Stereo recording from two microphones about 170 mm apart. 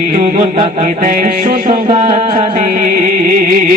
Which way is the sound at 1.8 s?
40° right (ahead or behind).